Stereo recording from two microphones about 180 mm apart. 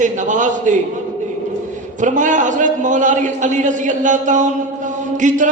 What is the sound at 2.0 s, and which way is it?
A man's voice, 45° right (ahead or behind).